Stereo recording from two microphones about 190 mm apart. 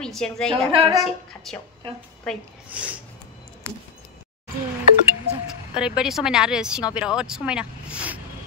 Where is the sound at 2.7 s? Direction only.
5° right (ahead or behind).